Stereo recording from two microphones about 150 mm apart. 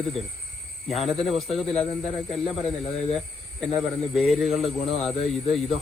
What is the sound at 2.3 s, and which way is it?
Speech, centre (ahead or behind).